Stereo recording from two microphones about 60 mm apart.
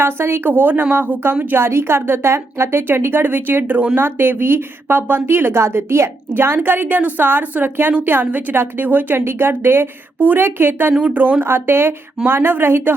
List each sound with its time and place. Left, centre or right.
0.0 s speech: right